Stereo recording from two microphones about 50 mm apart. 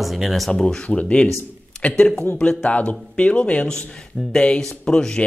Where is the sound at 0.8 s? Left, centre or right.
Left.